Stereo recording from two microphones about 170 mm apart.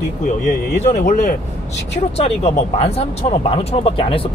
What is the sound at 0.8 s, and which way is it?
Speech, 50° left (ahead or behind).